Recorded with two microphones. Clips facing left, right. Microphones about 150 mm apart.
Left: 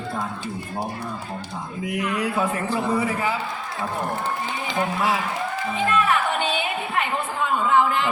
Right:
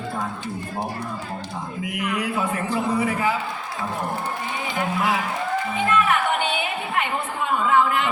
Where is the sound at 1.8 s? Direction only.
30° left (ahead or behind).